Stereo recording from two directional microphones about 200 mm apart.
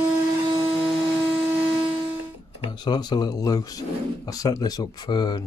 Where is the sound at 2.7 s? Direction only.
20° left (ahead or behind).